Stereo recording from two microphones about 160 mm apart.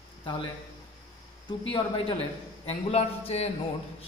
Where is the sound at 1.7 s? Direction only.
35° left (ahead or behind).